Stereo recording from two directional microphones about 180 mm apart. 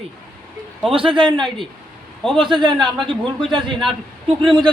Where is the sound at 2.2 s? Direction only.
5° left (ahead or behind).